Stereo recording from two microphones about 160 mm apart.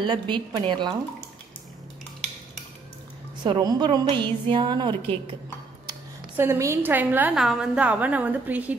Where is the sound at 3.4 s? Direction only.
25° right (ahead or behind).